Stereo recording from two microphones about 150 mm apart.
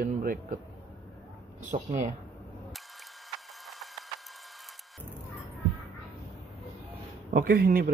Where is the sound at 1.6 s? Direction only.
55° right (ahead or behind).